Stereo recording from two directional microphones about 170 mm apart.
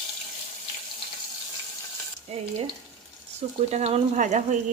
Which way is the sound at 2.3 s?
40° right (ahead or behind).